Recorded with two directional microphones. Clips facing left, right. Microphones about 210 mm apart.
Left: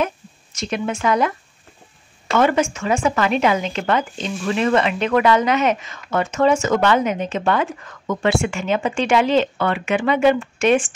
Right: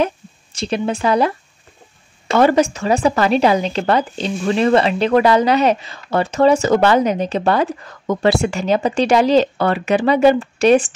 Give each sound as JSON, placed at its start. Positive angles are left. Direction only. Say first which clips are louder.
{"t": 0.0, "sound": "speech", "louder": "right 4 dB", "side_deg": -30}
{"t": 2.3, "sound": "speech", "louder": "right 4 dB", "side_deg": -35}